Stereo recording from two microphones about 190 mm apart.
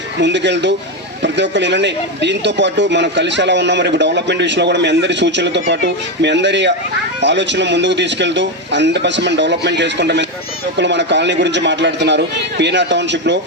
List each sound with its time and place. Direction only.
0.2 s speech: 70° right (ahead or behind)